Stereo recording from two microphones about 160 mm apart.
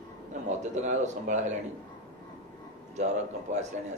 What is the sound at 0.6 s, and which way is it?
Speech, 45° right (ahead or behind).